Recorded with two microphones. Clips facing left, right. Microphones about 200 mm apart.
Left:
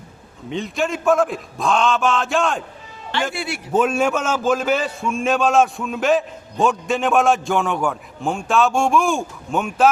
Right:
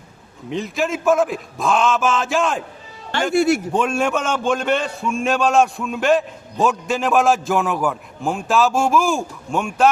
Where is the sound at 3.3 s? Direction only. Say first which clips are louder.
Right 12 dB; 45° right (ahead or behind).